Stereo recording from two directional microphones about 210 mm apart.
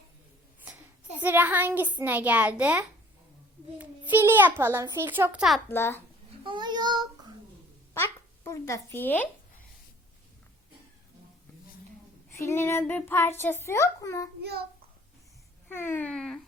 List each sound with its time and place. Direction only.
1.2 s a child's voice: 10° right (ahead or behind)
5.6 s a child's voice: 10° left (ahead or behind)
6.4 s child singing: 20° right (ahead or behind)
7.9 s a child's voice: 10° left (ahead or behind)
12.3 s a child's voice: 15° left (ahead or behind)
15.7 s a child's voice: 10° left (ahead or behind)